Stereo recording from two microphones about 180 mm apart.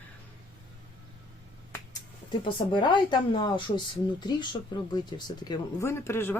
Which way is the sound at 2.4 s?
25° left (ahead or behind).